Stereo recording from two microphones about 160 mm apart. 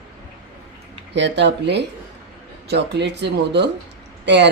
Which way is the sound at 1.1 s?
90° right.